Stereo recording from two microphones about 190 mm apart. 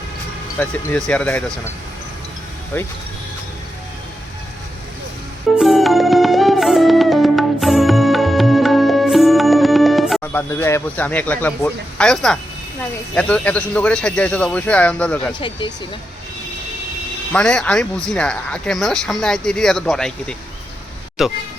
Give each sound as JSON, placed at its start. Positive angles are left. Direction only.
{"t": 0.6, "sound": "speech", "side_deg": 10}
{"t": 2.7, "sound": "speech", "side_deg": 15}
{"t": 5.5, "sound": "music", "side_deg": 0}
{"t": 10.3, "sound": "speech", "side_deg": 15}
{"t": 15.3, "sound": "speech", "side_deg": 25}
{"t": 17.3, "sound": "speech", "side_deg": 5}